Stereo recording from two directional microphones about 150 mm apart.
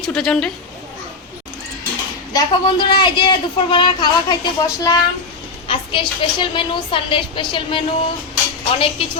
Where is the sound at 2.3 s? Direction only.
30° left (ahead or behind).